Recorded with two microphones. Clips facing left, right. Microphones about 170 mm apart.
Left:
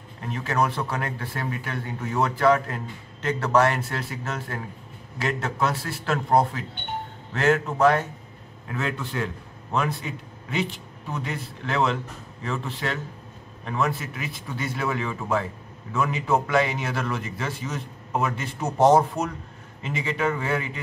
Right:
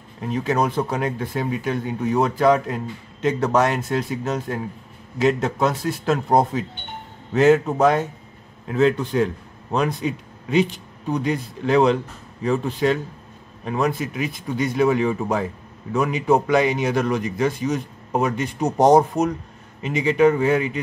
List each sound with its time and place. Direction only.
0.3 s a man's voice: 15° right (ahead or behind)